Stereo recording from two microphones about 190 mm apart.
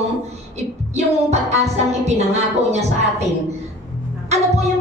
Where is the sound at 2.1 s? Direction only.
35° right (ahead or behind).